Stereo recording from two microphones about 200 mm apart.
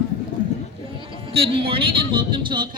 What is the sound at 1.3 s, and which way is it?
Speech, 30° right (ahead or behind).